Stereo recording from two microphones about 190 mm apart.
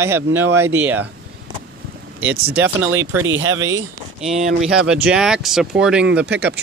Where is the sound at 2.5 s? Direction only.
10° right (ahead or behind).